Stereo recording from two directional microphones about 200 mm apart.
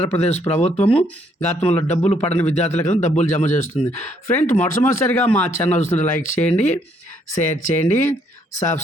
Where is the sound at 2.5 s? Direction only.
35° left (ahead or behind).